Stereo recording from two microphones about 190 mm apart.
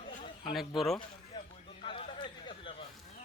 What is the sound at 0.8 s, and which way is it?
Speech, centre (ahead or behind).